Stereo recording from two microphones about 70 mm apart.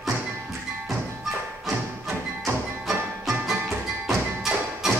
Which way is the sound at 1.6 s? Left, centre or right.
Centre.